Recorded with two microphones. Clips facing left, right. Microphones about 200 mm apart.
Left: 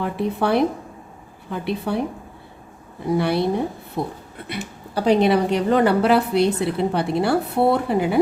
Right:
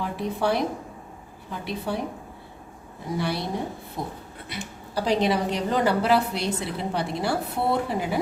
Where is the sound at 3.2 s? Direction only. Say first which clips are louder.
Left 7 dB; 60° left (ahead or behind).